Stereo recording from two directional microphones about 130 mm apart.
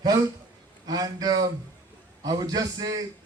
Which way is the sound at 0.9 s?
30° right (ahead or behind).